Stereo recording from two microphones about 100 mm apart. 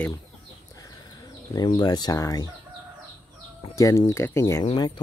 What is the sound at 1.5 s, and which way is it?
Speech, 40° left (ahead or behind).